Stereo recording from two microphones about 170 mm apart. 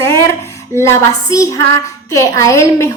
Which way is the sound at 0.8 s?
15° left (ahead or behind).